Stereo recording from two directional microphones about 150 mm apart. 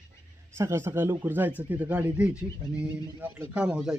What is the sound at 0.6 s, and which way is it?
Speech, 15° right (ahead or behind).